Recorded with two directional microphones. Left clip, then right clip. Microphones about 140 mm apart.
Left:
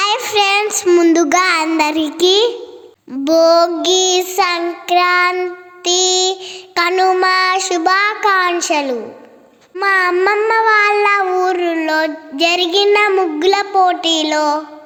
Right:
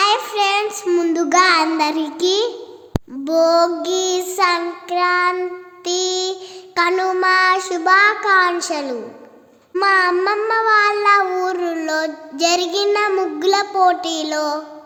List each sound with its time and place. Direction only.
0.0 s child singing: 30° left (ahead or behind)
0.9 s child singing: 20° left (ahead or behind)
5.4 s child singing: 10° left (ahead or behind)
9.8 s child singing: 25° left (ahead or behind)
10.3 s child singing: 10° left (ahead or behind)